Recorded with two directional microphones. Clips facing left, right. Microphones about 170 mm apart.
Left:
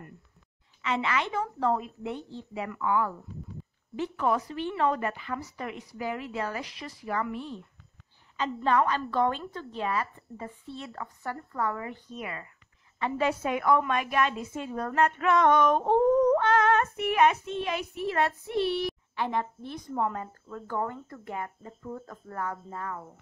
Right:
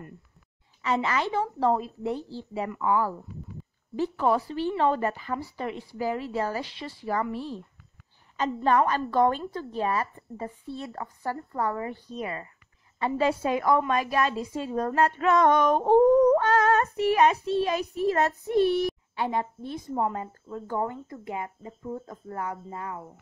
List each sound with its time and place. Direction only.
0.8 s a woman's voice: 40° right (ahead or behind)
8.6 s a woman's voice: 45° right (ahead or behind)
19.2 s speech: 25° right (ahead or behind)